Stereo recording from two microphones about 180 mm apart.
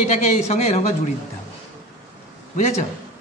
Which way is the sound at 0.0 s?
40° left (ahead or behind).